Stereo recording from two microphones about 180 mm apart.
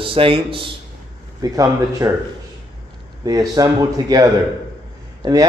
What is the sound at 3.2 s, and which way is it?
Speech, 20° right (ahead or behind).